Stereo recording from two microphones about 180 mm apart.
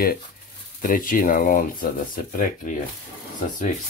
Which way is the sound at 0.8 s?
50° left (ahead or behind).